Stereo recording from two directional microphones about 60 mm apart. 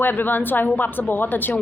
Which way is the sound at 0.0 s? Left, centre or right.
Left.